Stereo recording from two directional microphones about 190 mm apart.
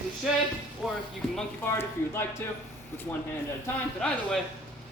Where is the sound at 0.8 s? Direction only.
Centre (ahead or behind).